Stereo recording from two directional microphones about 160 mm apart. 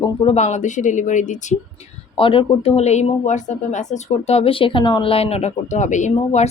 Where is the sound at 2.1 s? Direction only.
35° left (ahead or behind).